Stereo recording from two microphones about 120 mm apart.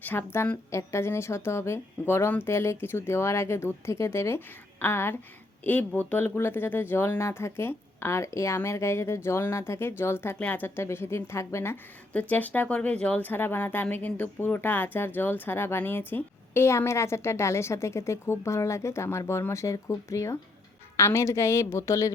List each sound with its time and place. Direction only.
0.0 s a woman's voice: 15° left (ahead or behind)